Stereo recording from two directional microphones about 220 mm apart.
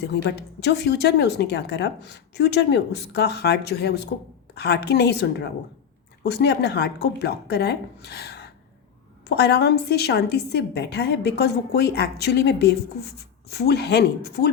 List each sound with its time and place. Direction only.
0.0 s a woman's voice: 50° left (ahead or behind)